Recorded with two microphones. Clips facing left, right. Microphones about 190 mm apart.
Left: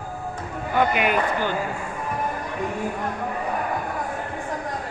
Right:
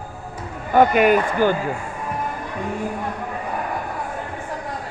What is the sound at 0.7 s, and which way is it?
Speech, 45° right (ahead or behind).